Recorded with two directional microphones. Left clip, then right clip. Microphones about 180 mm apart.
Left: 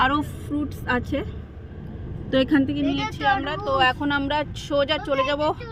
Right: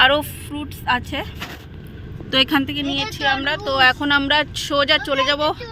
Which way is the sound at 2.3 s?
10° left (ahead or behind).